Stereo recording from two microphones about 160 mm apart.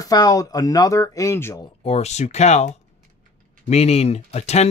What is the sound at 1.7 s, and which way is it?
Speech, 40° left (ahead or behind).